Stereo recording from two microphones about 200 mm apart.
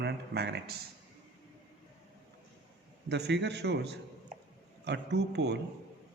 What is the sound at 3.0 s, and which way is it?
A man's voice, 55° right (ahead or behind).